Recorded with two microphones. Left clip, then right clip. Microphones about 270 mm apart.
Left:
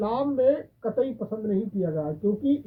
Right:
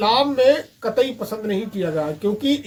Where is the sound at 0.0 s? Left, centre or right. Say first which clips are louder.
Right 7 dB; centre.